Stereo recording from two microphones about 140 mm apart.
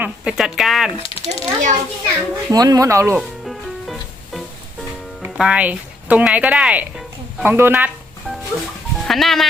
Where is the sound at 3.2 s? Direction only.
Centre (ahead or behind).